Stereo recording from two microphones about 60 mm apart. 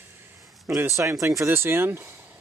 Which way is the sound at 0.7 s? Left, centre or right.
Right.